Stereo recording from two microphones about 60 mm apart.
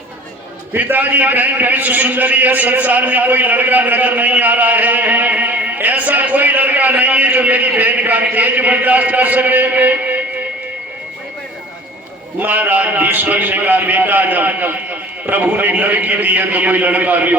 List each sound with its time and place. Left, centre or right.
0.8 s a man's voice: right
12.4 s a man's voice: right